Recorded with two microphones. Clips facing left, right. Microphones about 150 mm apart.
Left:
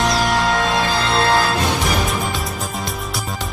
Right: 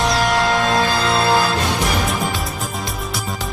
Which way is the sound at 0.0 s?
Centre (ahead or behind).